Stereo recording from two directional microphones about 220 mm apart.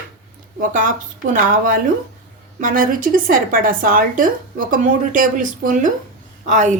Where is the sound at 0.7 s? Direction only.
40° right (ahead or behind).